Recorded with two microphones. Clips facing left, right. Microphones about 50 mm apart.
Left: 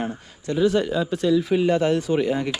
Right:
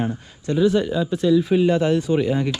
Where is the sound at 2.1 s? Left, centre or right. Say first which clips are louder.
Right 2 dB; left.